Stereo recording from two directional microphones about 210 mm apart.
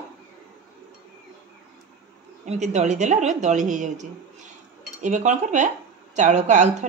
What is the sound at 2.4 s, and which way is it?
Speech, 35° right (ahead or behind).